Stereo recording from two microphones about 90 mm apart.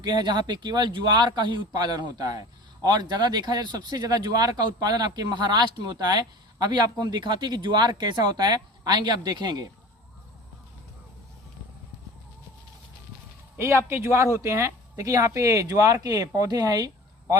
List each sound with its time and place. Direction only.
0.0 s speech: 55° right (ahead or behind)
13.6 s speech: 30° right (ahead or behind)